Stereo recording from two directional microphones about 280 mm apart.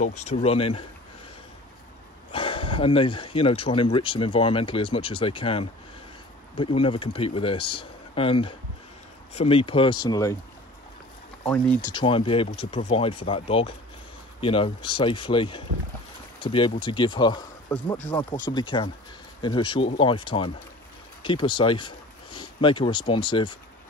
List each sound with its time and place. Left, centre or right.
0.0 s speech: left
2.3 s speech: centre
11.9 s speech: centre